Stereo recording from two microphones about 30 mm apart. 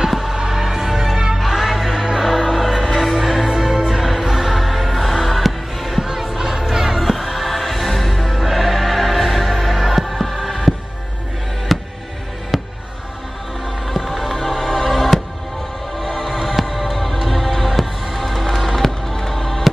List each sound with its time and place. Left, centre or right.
0.1 s music: centre
1.4 s music: centre
2.0 s music: centre
2.2 s music: centre
5.9 s music: centre
7.1 s music: centre
11.7 s music: centre
13.8 s music: centre
16.4 s music: centre
16.7 s music: centre